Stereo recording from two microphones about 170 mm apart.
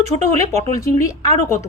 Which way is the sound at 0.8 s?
20° left (ahead or behind).